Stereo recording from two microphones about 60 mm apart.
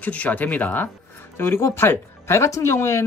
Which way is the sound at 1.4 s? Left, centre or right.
Left.